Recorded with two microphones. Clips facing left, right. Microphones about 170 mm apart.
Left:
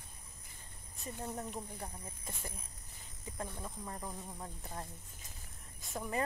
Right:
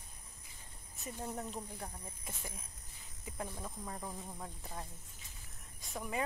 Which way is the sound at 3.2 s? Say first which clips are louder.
Even; 15° right (ahead or behind).